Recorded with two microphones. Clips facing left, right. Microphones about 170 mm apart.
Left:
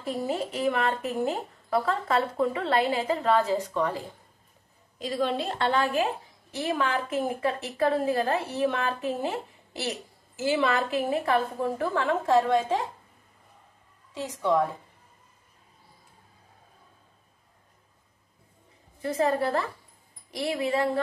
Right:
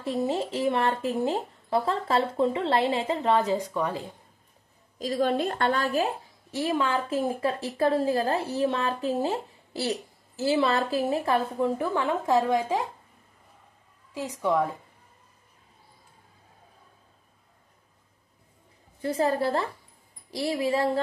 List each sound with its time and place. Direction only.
0.0 s a woman's voice: 25° right (ahead or behind)
4.9 s a woman's voice: 40° right (ahead or behind)
6.8 s a woman's voice: 25° right (ahead or behind)
11.6 s a woman's voice: 15° right (ahead or behind)
18.9 s a woman's voice: 30° right (ahead or behind)
20.2 s a woman's voice: 20° left (ahead or behind)
20.5 s a woman's voice: 30° right (ahead or behind)